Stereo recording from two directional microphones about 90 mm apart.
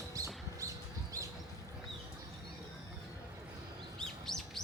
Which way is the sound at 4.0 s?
5° left (ahead or behind).